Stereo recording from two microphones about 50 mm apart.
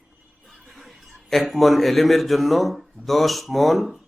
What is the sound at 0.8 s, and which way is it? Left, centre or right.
A man's voice, centre.